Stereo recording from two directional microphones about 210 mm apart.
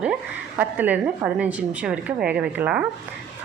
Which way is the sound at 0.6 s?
5° right (ahead or behind).